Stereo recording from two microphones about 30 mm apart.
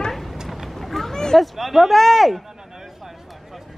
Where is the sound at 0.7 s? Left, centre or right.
Centre.